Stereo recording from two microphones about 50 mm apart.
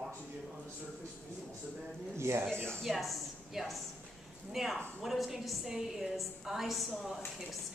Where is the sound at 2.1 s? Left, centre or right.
Right.